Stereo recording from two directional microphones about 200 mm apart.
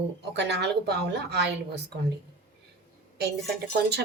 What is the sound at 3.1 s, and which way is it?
Speech, 55° right (ahead or behind).